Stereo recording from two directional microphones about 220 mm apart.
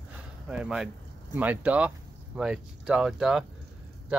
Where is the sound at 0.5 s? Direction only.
5° right (ahead or behind).